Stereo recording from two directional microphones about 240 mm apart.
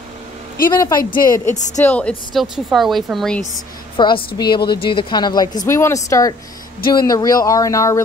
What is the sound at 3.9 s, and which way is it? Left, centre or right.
A woman's voice, left.